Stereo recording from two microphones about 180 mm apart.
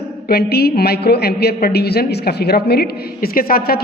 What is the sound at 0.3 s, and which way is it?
A woman's voice, 60° left (ahead or behind).